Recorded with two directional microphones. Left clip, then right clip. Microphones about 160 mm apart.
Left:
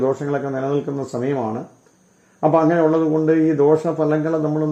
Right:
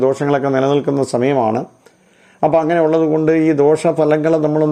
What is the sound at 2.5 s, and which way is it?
Speech, 20° right (ahead or behind).